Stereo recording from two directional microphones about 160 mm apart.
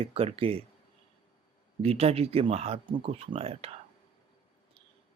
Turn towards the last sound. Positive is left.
turn(degrees=-40)  # may be behind; listen again after turning